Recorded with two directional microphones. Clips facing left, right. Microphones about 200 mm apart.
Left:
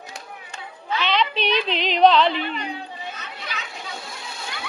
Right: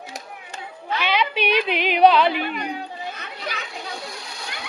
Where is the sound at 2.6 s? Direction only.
50° right (ahead or behind).